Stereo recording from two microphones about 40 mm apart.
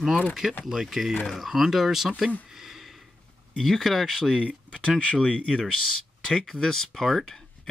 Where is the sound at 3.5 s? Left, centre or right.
Centre.